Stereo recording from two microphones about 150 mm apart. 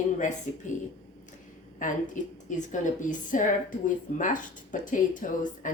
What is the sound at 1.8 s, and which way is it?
A woman's voice, 60° left (ahead or behind).